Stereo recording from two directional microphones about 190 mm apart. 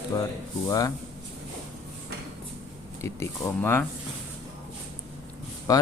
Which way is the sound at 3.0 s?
15° left (ahead or behind).